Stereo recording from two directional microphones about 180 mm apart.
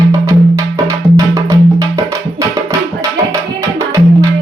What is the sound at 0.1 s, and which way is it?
Music, 15° right (ahead or behind).